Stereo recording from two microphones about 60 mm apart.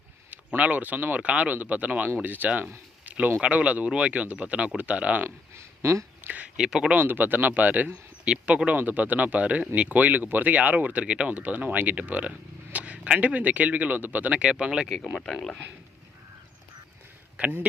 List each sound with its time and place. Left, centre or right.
0.3 s speech: right
5.5 s speech: right
6.2 s speech: right
6.6 s speech: centre
6.9 s speech: right
8.2 s speech: centre
15.1 s speech: centre